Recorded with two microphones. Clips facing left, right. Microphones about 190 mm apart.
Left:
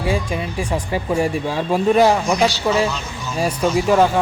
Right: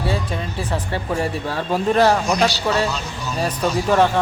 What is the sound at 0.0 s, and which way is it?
Speech, 10° left (ahead or behind).